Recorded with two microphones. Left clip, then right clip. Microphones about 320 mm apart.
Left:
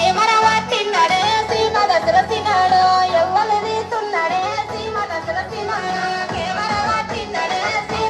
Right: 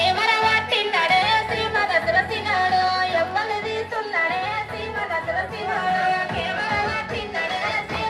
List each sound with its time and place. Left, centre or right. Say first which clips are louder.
0.0 s music: left 5 dB; left